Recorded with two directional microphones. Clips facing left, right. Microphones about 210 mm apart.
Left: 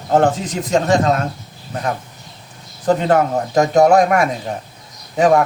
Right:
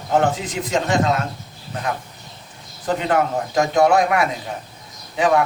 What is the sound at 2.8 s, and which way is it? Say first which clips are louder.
Speech: left 5 dB; 40° left (ahead or behind).